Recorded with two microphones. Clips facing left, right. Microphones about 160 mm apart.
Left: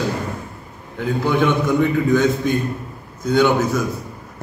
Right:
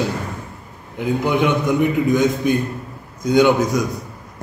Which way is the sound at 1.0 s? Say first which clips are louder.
Even; 15° right (ahead or behind).